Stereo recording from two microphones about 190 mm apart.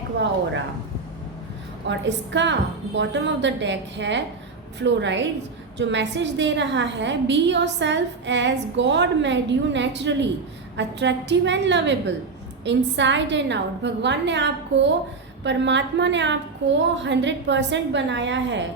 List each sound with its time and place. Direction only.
1.9 s a woman's voice: 70° right (ahead or behind)